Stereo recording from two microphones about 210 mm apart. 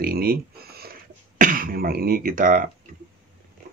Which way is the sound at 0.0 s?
45° right (ahead or behind).